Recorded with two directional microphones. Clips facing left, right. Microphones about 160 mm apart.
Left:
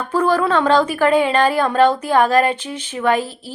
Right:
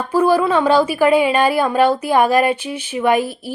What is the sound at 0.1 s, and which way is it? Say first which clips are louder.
A woman's voice: right 2 dB; 10° right (ahead or behind).